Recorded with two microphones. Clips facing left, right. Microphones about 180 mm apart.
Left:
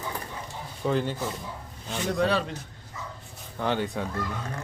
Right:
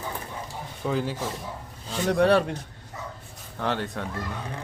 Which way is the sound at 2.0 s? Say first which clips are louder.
Right 5 dB; 65° right (ahead or behind).